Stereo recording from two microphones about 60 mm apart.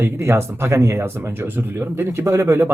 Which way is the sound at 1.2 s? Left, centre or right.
Right.